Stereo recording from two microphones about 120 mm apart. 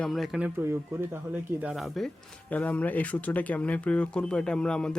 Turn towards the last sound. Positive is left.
turn(degrees=5)  # may be behind; listen again after turning